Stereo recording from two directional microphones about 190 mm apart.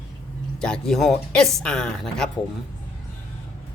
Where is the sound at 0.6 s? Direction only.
5° left (ahead or behind).